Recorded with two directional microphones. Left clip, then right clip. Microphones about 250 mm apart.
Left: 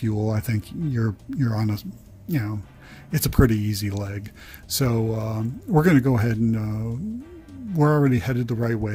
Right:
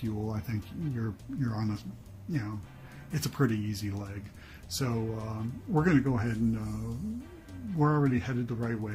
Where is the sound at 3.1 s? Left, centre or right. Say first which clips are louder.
Left 10 dB; left.